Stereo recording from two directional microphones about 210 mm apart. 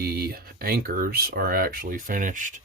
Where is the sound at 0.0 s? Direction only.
45° right (ahead or behind).